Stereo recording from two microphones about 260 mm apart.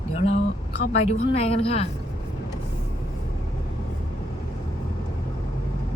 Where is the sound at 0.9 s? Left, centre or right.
Left.